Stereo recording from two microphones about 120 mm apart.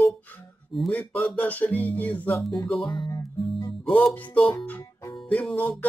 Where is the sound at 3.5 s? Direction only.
45° left (ahead or behind).